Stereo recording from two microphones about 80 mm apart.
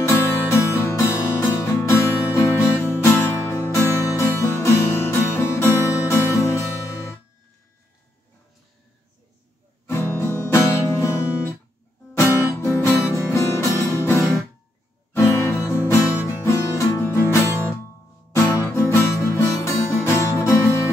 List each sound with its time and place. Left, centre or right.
0.0 s music: left
9.8 s music: left
12.6 s music: left
15.2 s music: left
18.3 s music: left
18.6 s music: left